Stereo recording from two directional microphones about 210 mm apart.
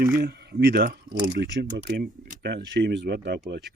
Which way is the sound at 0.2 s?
50° right (ahead or behind).